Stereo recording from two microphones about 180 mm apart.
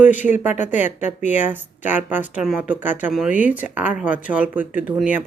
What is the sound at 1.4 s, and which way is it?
Speech, 10° right (ahead or behind).